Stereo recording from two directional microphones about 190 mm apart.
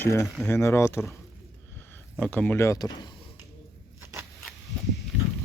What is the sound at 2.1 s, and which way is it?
Speech, 5° left (ahead or behind).